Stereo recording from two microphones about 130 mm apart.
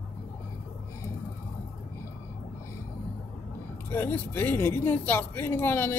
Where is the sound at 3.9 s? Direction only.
15° left (ahead or behind).